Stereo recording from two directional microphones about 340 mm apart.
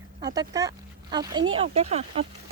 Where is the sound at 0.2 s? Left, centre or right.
Centre.